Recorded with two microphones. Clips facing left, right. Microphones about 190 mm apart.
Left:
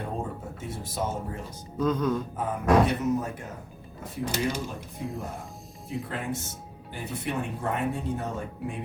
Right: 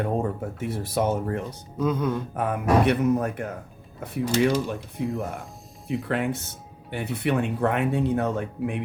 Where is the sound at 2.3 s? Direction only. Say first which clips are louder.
Right 1 dB; 70° right (ahead or behind).